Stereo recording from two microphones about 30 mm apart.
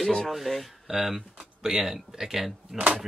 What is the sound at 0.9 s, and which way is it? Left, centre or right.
Speech, right.